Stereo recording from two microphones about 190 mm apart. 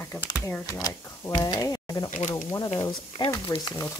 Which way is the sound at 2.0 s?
40° left (ahead or behind).